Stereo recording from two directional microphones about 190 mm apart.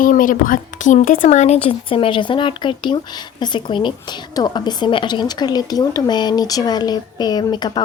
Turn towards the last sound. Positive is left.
turn(degrees=20)  # may be behind; listen again after turning